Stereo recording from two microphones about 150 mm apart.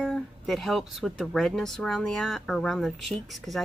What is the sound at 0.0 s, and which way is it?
Speech, centre (ahead or behind).